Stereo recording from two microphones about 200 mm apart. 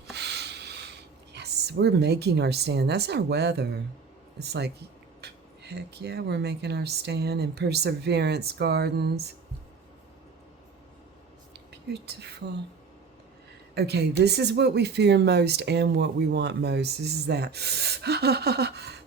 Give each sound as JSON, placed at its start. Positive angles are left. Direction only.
{"t": 0.1, "sound": "a sound", "side_deg": -60}
{"t": 4.4, "sound": "speech", "side_deg": -55}
{"t": 11.7, "sound": "speech", "side_deg": -60}
{"t": 13.7, "sound": "speech", "side_deg": -55}